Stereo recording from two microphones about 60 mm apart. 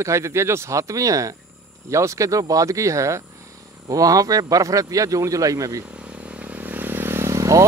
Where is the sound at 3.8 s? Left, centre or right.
Right.